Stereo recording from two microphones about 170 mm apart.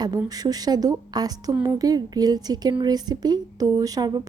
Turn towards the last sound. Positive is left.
turn(degrees=-20)  # may be behind; listen again after turning